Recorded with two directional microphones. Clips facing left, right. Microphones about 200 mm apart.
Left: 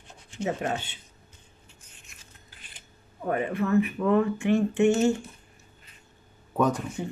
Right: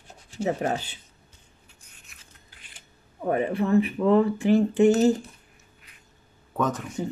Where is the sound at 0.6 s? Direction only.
35° right (ahead or behind).